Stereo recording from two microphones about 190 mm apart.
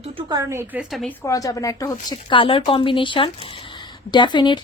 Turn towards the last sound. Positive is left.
turn(degrees=25)  # may be behind; listen again after turning